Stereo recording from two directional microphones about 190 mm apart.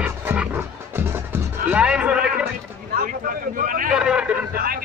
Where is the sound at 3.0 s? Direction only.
45° right (ahead or behind).